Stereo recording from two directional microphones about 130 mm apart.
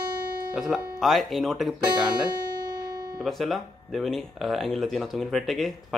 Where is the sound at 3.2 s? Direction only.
Centre (ahead or behind).